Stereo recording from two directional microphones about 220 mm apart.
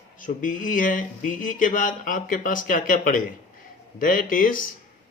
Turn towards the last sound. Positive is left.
turn(degrees=40)  # may be behind; listen again after turning